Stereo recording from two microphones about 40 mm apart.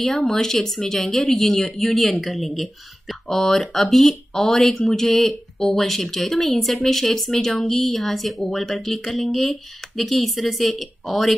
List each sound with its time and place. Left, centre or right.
0.0 s speech: centre